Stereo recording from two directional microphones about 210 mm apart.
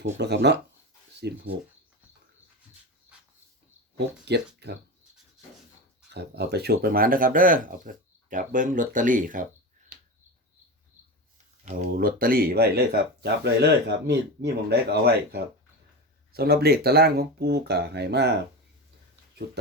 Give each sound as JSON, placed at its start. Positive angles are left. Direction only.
{"t": 0.0, "sound": "speech", "side_deg": -55}
{"t": 3.9, "sound": "speech", "side_deg": -50}
{"t": 6.1, "sound": "speech", "side_deg": -55}
{"t": 9.9, "sound": "a sound", "side_deg": -45}
{"t": 11.9, "sound": "speech", "side_deg": -45}